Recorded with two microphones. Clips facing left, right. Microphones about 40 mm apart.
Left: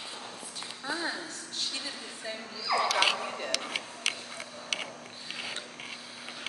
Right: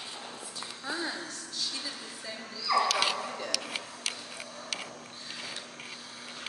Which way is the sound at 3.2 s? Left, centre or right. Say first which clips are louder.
Left 1 dB; left.